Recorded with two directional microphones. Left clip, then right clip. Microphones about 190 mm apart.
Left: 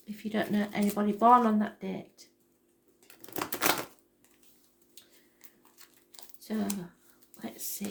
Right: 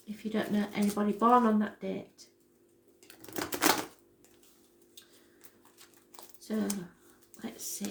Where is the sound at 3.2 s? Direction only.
15° left (ahead or behind).